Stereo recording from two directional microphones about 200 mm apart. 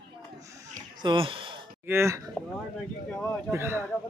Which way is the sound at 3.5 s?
10° right (ahead or behind).